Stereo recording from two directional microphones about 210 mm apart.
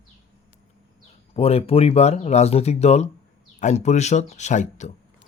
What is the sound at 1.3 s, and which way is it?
Speech, 30° left (ahead or behind).